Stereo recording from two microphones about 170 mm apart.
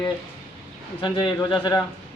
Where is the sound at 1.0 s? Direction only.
25° left (ahead or behind).